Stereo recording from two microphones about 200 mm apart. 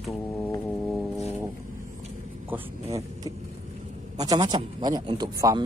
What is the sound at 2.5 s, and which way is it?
Speech, 15° right (ahead or behind).